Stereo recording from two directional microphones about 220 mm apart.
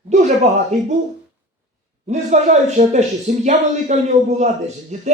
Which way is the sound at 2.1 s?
30° right (ahead or behind).